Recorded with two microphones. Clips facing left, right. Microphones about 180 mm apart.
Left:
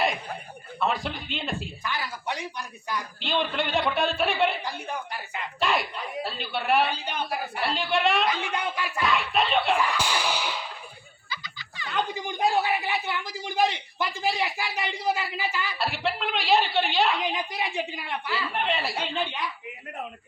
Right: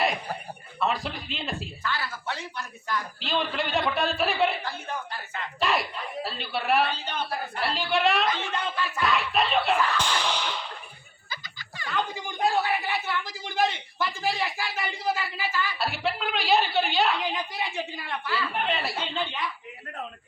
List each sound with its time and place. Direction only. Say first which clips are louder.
0.8 s a woman's voice: left 1 dB; centre (ahead or behind)
1.8 s speech: even; 15° left (ahead or behind)
3.2 s a woman's voice: left 3 dB; centre (ahead or behind)
5.1 s speech: left 1 dB; 15° left (ahead or behind)
5.5 s a woman's voice: even; centre (ahead or behind)
6.8 s a woman's voice: left 1 dB; 15° left (ahead or behind)
8.4 s speech: even; 15° left (ahead or behind)
9.0 s a woman's voice: even; centre (ahead or behind)
9.7 s whip: even; 10° left (ahead or behind)
11.3 s a sound: left 1 dB; 50° right (ahead or behind)
11.9 s speech: left 1 dB; 20° left (ahead or behind)
15.8 s a woman's voice: left 3 dB; centre (ahead or behind)
17.2 s speech: left 1 dB; 15° left (ahead or behind)
18.3 s a woman's voice: even; centre (ahead or behind)